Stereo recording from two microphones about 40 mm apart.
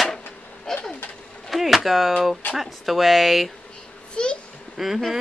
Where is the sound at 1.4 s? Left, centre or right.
Centre.